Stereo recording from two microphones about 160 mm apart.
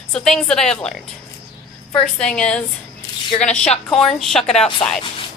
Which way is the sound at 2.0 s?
5° left (ahead or behind).